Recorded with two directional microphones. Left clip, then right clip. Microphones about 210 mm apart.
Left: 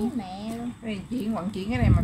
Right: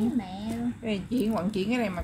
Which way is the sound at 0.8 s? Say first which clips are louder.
Right 3 dB; 30° right (ahead or behind).